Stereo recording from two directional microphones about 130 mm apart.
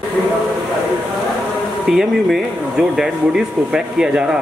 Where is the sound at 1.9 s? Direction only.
Centre (ahead or behind).